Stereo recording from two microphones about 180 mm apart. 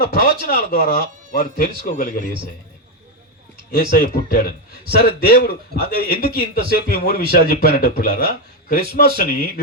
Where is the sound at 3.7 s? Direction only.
55° left (ahead or behind).